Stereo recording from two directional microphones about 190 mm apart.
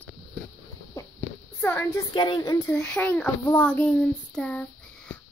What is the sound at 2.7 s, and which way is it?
A child's voice, 5° left (ahead or behind).